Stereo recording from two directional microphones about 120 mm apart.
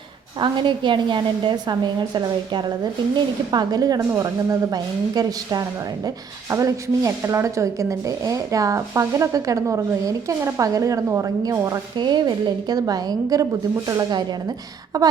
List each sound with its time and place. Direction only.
0.3 s a woman's voice: 40° right (ahead or behind)